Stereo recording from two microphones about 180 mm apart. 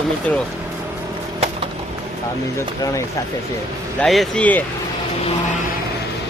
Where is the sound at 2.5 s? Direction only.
15° left (ahead or behind).